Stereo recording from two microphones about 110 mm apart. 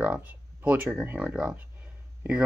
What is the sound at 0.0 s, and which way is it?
Speech, 15° right (ahead or behind).